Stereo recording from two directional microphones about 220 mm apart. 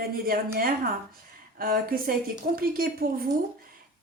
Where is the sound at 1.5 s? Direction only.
40° right (ahead or behind).